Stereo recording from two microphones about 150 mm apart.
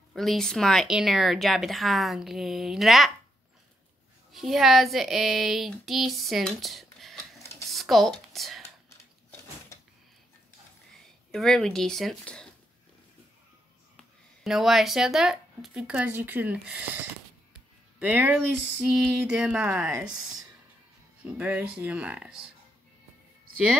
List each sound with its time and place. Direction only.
0.1 s speech: centre (ahead or behind)
4.3 s speech: centre (ahead or behind)
7.7 s a sound: centre (ahead or behind)
11.3 s speech: 5° left (ahead or behind)
14.4 s speech: centre (ahead or behind)